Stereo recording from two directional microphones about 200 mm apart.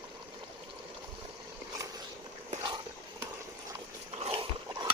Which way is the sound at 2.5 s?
25° right (ahead or behind).